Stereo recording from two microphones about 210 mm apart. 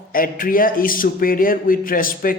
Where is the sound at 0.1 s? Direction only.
40° left (ahead or behind).